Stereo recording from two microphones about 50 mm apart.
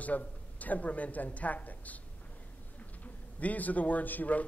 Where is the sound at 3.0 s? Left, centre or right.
Left.